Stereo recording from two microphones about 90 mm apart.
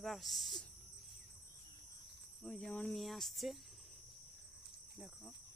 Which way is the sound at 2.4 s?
10° left (ahead or behind).